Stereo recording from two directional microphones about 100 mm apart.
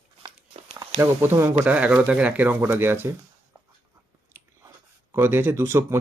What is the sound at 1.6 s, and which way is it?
Speech, 15° right (ahead or behind).